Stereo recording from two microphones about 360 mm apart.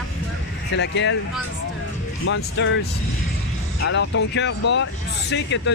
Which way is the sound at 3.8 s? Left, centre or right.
Left.